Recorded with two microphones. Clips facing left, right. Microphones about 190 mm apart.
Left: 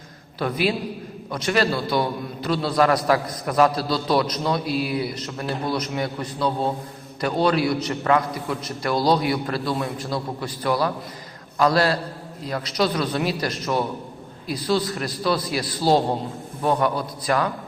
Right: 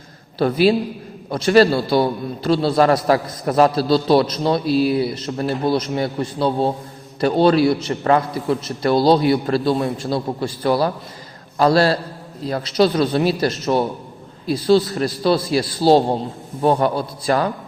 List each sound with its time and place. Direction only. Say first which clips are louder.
0.3 s a man's voice: right 8 dB; 30° right (ahead or behind)